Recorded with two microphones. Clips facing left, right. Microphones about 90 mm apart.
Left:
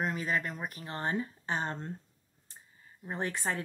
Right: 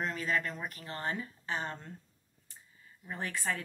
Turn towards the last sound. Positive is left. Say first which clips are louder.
# left 2 dB
turn(degrees=25)  # may be behind; listen again after turning